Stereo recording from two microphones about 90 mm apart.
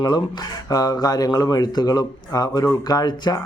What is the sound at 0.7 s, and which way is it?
Speech, 45° left (ahead or behind).